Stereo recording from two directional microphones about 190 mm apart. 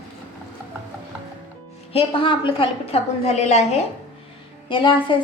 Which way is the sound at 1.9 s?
25° left (ahead or behind).